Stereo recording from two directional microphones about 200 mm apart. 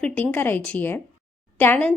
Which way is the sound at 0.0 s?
10° left (ahead or behind).